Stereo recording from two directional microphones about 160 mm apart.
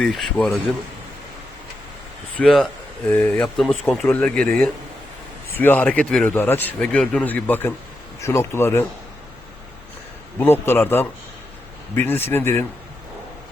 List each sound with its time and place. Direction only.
0.0 s speech: 5° left (ahead or behind)
2.4 s speech: centre (ahead or behind)
3.1 s speech: 10° left (ahead or behind)
10.4 s speech: 15° left (ahead or behind)